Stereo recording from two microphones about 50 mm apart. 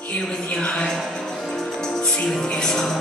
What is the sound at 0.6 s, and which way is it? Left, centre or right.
Music, centre.